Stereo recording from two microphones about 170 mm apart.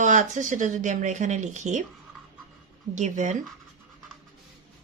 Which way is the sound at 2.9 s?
45° right (ahead or behind).